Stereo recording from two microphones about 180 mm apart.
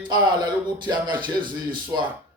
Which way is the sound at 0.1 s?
25° right (ahead or behind).